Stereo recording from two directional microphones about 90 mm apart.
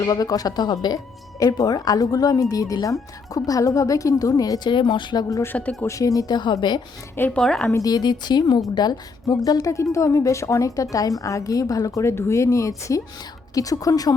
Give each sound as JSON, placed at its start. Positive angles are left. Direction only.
{"t": 0.0, "sound": "a woman's voice", "side_deg": 45}
{"t": 5.5, "sound": "speech", "side_deg": 15}
{"t": 5.8, "sound": "speech", "side_deg": 35}
{"t": 7.3, "sound": "speech", "side_deg": 10}
{"t": 7.7, "sound": "a woman's voice", "side_deg": 45}